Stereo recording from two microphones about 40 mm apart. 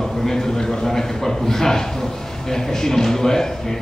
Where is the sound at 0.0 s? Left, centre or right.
Centre.